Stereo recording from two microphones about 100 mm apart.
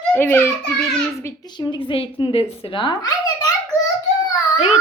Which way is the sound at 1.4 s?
45° left (ahead or behind).